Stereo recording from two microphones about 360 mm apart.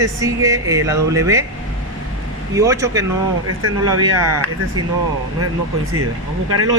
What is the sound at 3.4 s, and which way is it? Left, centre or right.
Speech, right.